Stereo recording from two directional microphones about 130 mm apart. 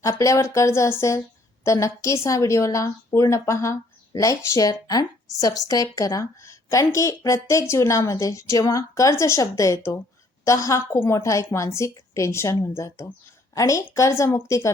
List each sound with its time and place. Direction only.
0.0 s a woman's voice: 25° left (ahead or behind)